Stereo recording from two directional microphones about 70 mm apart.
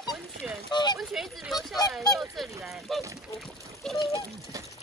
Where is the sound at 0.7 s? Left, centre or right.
Left.